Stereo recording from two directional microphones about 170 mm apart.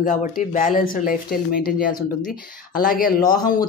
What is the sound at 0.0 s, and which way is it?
Speech, 50° left (ahead or behind).